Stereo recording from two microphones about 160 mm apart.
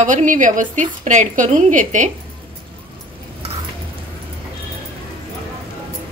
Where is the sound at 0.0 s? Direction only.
50° right (ahead or behind).